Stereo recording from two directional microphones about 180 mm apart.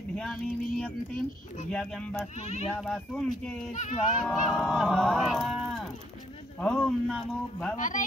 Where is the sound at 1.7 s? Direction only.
5° left (ahead or behind).